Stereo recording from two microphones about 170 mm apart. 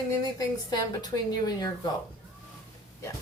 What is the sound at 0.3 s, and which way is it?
A woman's voice, 20° left (ahead or behind).